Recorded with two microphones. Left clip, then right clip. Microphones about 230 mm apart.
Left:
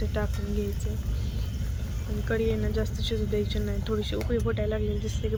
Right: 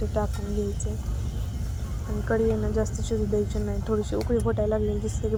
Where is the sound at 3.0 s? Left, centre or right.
Right.